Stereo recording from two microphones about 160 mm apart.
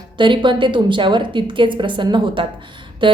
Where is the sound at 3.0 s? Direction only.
30° right (ahead or behind).